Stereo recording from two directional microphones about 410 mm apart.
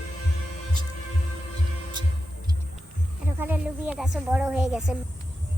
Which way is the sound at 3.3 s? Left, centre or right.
Centre.